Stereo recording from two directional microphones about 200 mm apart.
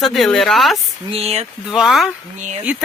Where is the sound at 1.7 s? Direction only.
Centre (ahead or behind).